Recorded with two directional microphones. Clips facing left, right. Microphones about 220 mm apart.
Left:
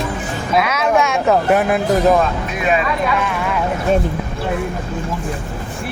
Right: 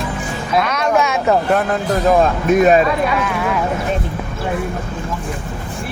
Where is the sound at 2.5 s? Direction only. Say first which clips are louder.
Right 8 dB; 45° right (ahead or behind).